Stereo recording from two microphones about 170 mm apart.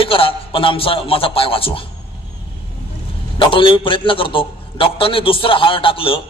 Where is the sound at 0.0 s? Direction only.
30° left (ahead or behind).